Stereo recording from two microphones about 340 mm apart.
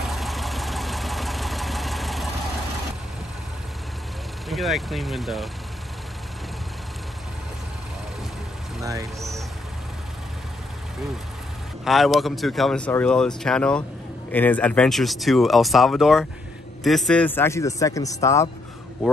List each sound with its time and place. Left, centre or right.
0.1 s vehicle: centre
4.5 s speech: centre
8.8 s speech: centre
11.8 s speech: centre